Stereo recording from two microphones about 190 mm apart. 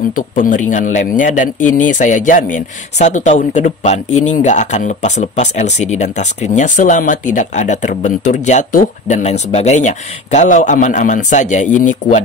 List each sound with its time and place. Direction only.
0.1 s a man's voice: 45° left (ahead or behind)